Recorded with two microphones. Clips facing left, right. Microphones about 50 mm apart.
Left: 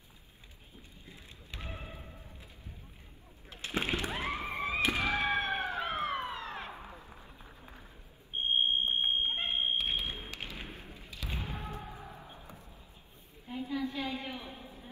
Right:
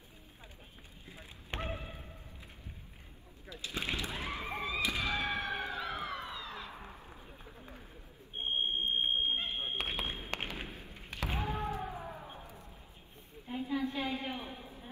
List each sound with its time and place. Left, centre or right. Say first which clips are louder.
1.5 s thump: right 7 dB; right
3.4 s a sound: left 4 dB; left
8.4 s smoke detector: left 4 dB; left
9.6 s basketball bounce: left 4 dB; right
10.3 s thump: right 5 dB; right
10.7 s thump: left 1 dB; left
11.0 s a sound: right 5 dB; right
11.2 s basketball bounce: right 5 dB; right
13.5 s a sound: right 1 dB; centre